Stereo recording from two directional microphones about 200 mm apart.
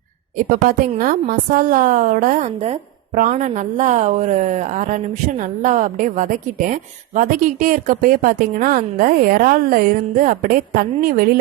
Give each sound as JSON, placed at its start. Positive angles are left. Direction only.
{"t": 0.7, "sound": "a woman's voice", "side_deg": -45}